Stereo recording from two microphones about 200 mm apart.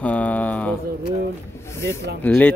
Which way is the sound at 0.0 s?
5° left (ahead or behind).